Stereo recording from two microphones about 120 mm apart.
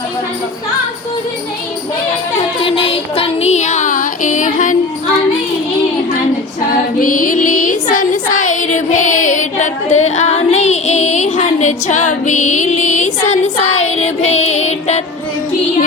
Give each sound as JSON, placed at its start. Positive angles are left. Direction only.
{"t": 2.6, "sound": "music", "side_deg": 55}
{"t": 7.1, "sound": "music", "side_deg": 90}
{"t": 7.9, "sound": "child singing", "side_deg": 90}